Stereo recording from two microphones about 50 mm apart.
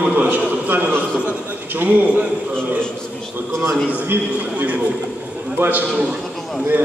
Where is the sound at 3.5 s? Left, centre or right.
Right.